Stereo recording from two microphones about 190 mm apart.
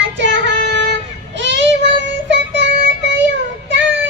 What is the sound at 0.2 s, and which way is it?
Child singing, 70° right (ahead or behind).